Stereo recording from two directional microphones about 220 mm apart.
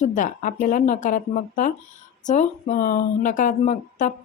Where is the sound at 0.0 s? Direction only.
35° left (ahead or behind).